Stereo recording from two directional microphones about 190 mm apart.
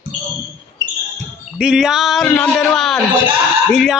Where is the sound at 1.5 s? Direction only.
5° right (ahead or behind).